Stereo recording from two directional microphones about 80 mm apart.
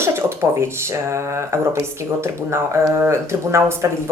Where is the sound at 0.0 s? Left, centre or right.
Right.